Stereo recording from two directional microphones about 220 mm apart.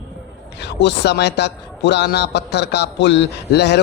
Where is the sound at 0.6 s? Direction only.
50° left (ahead or behind).